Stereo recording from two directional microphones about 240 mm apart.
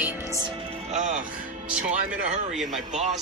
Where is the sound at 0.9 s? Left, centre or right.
Right.